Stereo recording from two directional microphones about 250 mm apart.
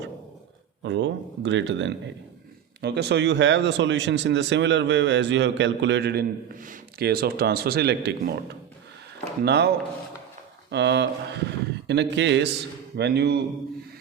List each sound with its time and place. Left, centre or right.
0.8 s speech: right
10.7 s speech: right